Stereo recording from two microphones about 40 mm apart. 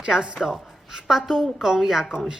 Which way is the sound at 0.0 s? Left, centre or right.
Centre.